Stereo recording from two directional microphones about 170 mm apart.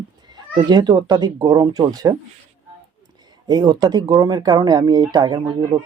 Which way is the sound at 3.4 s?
25° right (ahead or behind).